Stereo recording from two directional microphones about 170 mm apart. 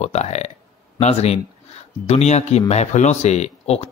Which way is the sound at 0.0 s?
40° left (ahead or behind).